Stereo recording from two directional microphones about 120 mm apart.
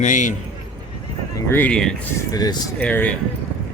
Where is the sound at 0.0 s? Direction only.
90° left.